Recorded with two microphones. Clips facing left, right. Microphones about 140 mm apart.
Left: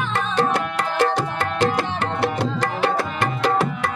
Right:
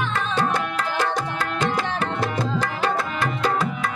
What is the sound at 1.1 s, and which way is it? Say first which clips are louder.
Music: left 3 dB; 70° left (ahead or behind).